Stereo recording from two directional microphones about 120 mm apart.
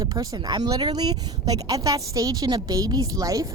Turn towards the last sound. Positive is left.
turn(degrees=-30)  # may be behind; listen again after turning